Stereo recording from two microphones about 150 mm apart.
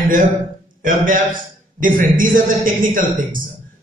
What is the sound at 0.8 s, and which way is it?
A man's voice, 60° right (ahead or behind).